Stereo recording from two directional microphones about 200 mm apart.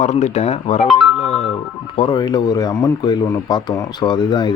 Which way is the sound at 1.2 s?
30° left (ahead or behind).